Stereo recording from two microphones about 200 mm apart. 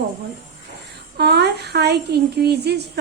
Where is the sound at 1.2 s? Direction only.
55° right (ahead or behind).